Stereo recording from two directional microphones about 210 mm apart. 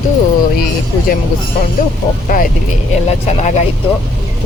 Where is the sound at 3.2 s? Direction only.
30° left (ahead or behind).